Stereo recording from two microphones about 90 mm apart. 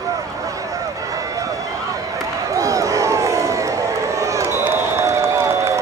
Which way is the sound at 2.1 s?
40° right (ahead or behind).